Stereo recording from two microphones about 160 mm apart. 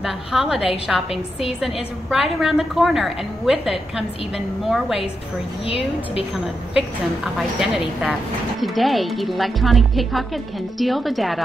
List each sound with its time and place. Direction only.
0.0 s speech: centre (ahead or behind)
7.3 s speech: centre (ahead or behind)